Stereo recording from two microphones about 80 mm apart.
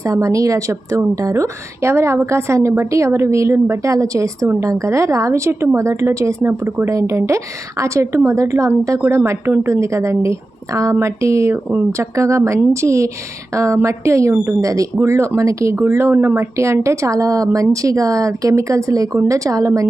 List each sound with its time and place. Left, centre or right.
0.0 s speech: right